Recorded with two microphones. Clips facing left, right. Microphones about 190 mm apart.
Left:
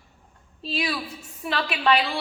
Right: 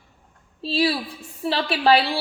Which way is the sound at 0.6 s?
30° right (ahead or behind).